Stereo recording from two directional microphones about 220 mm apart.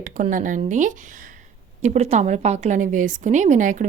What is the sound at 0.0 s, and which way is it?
A woman's voice, 35° right (ahead or behind).